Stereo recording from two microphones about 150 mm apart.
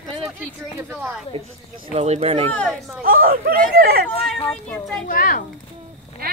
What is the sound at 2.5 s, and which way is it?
Speech, 5° left (ahead or behind).